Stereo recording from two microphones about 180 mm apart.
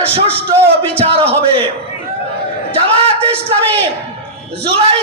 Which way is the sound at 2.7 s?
35° right (ahead or behind).